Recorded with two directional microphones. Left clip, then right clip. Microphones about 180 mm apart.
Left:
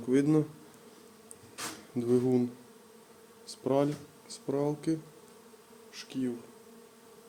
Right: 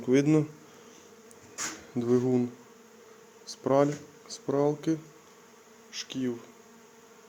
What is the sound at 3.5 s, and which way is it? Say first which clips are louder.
Speech: right 4 dB; 5° right (ahead or behind).